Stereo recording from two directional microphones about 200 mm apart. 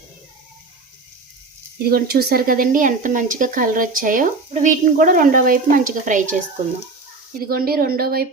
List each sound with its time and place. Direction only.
1.9 s speech: 50° right (ahead or behind)
7.3 s speech: 50° right (ahead or behind)